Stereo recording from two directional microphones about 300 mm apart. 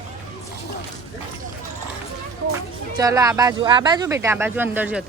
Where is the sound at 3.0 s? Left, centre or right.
Centre.